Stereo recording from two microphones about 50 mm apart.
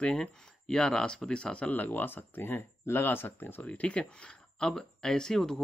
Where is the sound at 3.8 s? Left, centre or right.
Left.